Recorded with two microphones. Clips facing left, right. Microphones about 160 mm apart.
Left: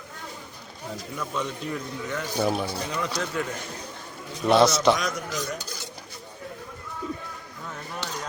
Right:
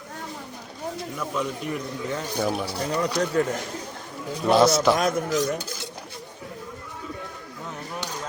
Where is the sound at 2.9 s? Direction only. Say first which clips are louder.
Right 5 dB; 40° right (ahead or behind).